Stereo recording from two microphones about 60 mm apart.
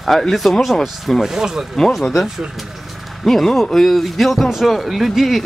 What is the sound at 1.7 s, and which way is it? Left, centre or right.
Speech, centre.